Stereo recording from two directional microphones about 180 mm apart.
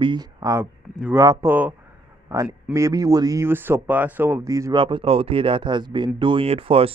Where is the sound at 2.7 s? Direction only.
20° right (ahead or behind).